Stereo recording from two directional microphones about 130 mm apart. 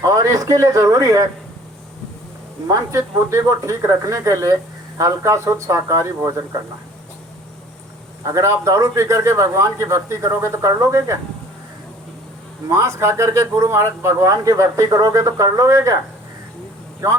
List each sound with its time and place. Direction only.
0.0 s speech: 25° right (ahead or behind)
2.6 s speech: 25° right (ahead or behind)
8.2 s speech: 20° right (ahead or behind)
12.6 s speech: 20° right (ahead or behind)